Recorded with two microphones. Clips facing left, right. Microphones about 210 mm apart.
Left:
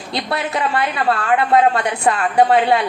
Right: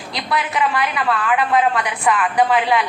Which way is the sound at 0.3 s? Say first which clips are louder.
Right 1 dB; 30° left (ahead or behind).